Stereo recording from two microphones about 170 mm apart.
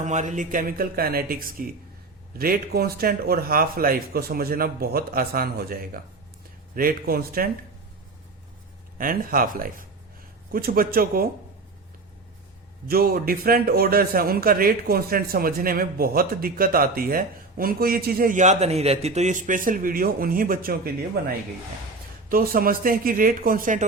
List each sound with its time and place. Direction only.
0.0 s a man's voice: 45° right (ahead or behind)
9.0 s a man's voice: 55° right (ahead or behind)
12.9 s a man's voice: 60° right (ahead or behind)